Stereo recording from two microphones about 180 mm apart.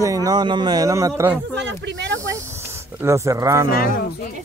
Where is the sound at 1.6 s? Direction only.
80° right.